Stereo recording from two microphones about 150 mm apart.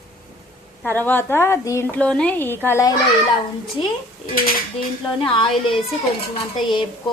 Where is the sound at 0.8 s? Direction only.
10° left (ahead or behind).